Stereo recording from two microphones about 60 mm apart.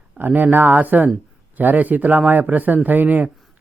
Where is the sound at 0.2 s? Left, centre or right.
Right.